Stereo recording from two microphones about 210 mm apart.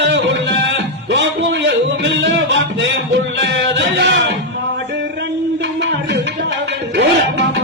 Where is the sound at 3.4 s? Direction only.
55° right (ahead or behind).